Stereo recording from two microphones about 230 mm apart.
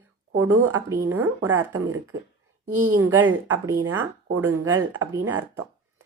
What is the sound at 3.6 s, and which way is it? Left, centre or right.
Speech, centre.